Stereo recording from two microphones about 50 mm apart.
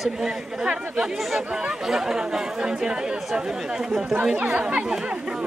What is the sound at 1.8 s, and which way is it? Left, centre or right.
Speech, centre.